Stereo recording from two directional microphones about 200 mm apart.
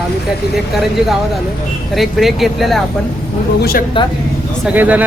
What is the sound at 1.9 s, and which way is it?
Speech, centre (ahead or behind).